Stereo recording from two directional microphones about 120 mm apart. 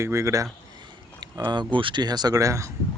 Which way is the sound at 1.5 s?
40° right (ahead or behind).